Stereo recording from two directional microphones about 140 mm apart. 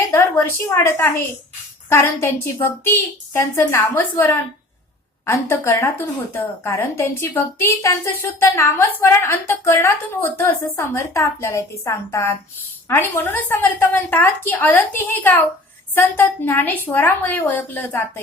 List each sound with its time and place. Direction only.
0.1 s a woman's voice: 15° left (ahead or behind)